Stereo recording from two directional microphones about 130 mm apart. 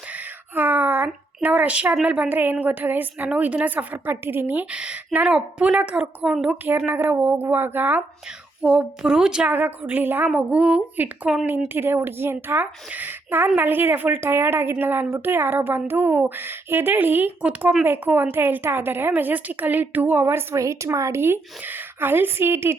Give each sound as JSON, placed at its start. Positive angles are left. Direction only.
{"t": 0.5, "sound": "speech", "side_deg": -15}